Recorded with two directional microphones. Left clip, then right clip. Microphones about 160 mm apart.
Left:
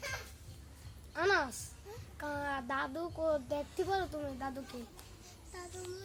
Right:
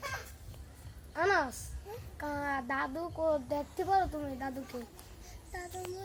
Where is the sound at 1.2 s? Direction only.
20° left (ahead or behind).